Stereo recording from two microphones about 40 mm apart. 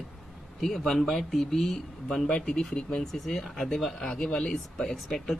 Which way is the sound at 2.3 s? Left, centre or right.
Centre.